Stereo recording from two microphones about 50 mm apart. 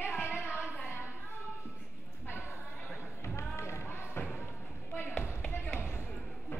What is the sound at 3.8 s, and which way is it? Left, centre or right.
Basketball bounce, left.